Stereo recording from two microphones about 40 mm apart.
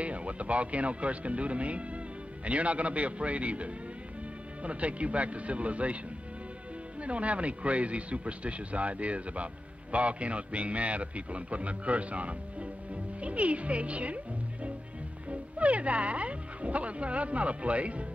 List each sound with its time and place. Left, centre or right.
0.0 s a man's voice: right
7.0 s a man's voice: right